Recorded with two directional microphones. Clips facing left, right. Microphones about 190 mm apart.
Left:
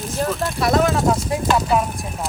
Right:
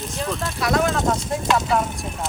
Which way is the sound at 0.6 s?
30° left (ahead or behind).